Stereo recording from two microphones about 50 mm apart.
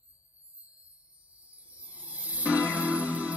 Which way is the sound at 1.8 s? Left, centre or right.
Right.